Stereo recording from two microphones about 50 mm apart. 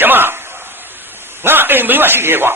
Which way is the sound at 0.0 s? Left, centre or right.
Right.